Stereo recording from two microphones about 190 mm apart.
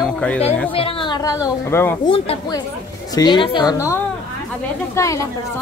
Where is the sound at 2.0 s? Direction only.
30° left (ahead or behind).